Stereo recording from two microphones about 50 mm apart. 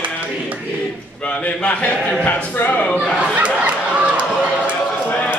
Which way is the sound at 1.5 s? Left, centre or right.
Left.